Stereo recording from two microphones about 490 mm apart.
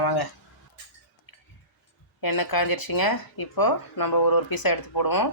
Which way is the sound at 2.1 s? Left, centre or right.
Left.